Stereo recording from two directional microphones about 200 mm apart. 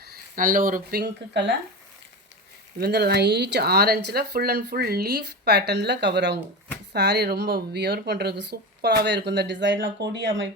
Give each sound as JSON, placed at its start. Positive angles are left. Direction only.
{"t": 0.0, "sound": "speech", "side_deg": -45}
{"t": 2.7, "sound": "speech", "side_deg": -55}